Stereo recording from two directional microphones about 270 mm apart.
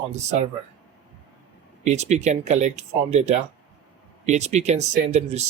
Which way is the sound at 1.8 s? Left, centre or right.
Right.